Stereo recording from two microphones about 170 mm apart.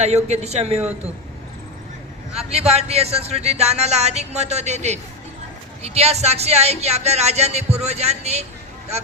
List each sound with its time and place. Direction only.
0.0 s speech: 40° right (ahead or behind)
2.4 s speech: 40° right (ahead or behind)